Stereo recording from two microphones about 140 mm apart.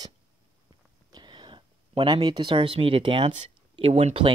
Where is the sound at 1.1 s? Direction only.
35° right (ahead or behind).